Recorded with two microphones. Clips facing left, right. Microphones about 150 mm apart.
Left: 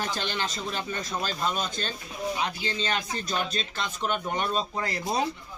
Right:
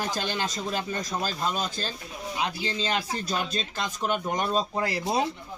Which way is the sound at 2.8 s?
5° right (ahead or behind).